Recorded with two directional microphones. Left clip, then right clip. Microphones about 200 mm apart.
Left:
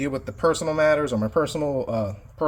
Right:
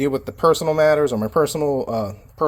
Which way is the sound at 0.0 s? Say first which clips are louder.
Right 5 dB; 30° right (ahead or behind).